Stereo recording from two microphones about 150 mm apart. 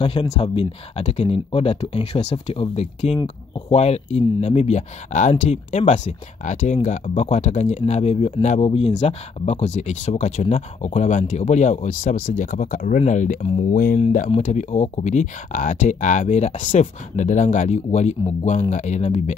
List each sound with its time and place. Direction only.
0.0 s speech: 35° left (ahead or behind)